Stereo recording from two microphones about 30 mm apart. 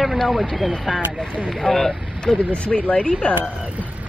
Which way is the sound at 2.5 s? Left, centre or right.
Left.